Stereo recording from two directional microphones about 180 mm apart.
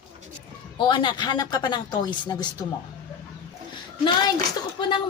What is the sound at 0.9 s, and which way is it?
A woman's voice, 25° left (ahead or behind).